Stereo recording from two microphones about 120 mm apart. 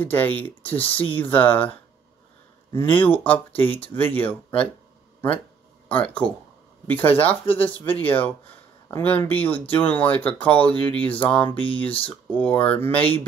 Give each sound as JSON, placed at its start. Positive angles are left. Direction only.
{"t": 0.0, "sound": "speech", "side_deg": 15}
{"t": 5.9, "sound": "speech", "side_deg": 10}